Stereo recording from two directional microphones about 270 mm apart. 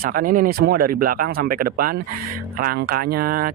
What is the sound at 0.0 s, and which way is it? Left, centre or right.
Speech, right.